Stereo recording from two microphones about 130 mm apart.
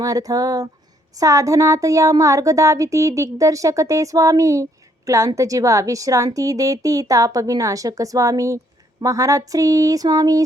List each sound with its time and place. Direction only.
0.0 s speech: 30° right (ahead or behind)